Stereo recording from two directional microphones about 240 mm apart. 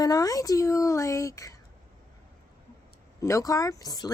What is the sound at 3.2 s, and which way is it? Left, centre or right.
Speech, centre.